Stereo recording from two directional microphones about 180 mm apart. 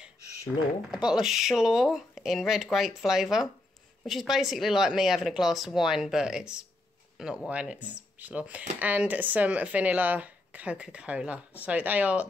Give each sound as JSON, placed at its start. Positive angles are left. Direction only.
{"t": 0.5, "sound": "speech", "side_deg": 0}